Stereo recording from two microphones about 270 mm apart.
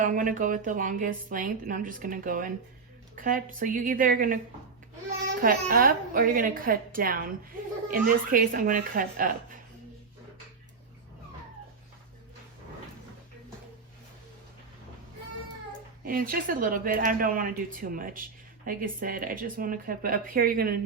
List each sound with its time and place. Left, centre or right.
0.0 s a woman's voice: right
16.0 s speech: right